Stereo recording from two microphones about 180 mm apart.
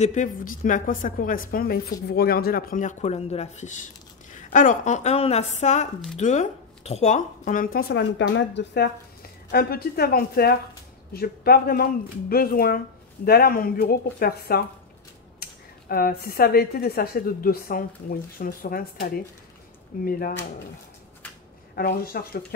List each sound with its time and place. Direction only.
0.0 s speech: 40° left (ahead or behind); by 8.9 s 70° left (ahead or behind)
9.5 s speech: 60° left (ahead or behind)
21.7 s speech: 55° left (ahead or behind)